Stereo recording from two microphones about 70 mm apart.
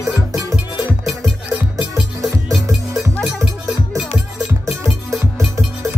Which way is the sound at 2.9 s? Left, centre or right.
Centre.